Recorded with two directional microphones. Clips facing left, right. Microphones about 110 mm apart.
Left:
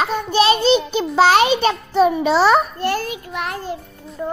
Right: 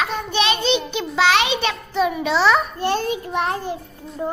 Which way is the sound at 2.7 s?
20° right (ahead or behind).